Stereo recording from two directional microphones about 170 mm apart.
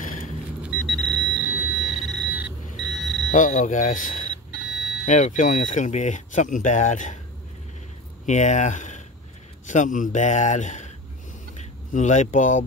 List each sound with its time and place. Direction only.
0.6 s a sound: 5° right (ahead or behind)
2.2 s alarm clock: 10° right (ahead or behind)
3.3 s speech: 55° left (ahead or behind)
4.7 s a sound: centre (ahead or behind)
5.0 s speech: 45° left (ahead or behind)
8.3 s speech: 45° left (ahead or behind)
11.9 s speech: 45° left (ahead or behind)